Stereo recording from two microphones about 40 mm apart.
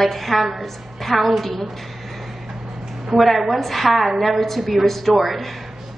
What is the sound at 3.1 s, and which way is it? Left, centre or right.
A woman's voice, centre.